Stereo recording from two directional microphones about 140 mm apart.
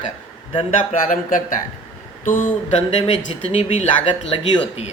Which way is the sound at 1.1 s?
70° left (ahead or behind).